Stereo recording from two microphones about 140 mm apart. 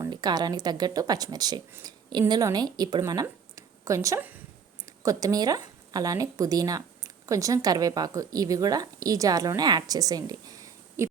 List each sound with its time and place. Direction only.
0.0 s a woman's voice: 30° right (ahead or behind)